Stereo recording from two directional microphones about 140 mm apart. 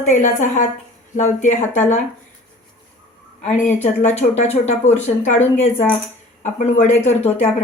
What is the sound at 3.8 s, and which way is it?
A woman's voice, 55° left (ahead or behind).